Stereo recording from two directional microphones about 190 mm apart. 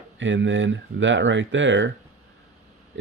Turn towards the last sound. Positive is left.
turn(degrees=-75)  # may be behind; listen again after turning